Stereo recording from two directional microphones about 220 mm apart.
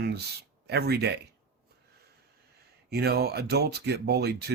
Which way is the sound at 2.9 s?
45° right (ahead or behind).